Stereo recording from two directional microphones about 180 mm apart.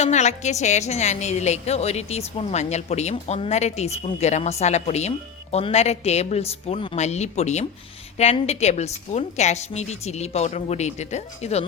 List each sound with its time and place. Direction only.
0.0 s a woman's voice: 40° left (ahead or behind)